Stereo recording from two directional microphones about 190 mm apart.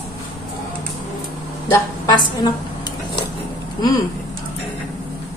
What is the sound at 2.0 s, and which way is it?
Dishes, 20° left (ahead or behind).